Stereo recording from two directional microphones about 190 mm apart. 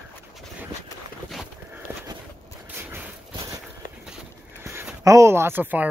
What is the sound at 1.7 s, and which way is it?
Clip-clop, 15° right (ahead or behind).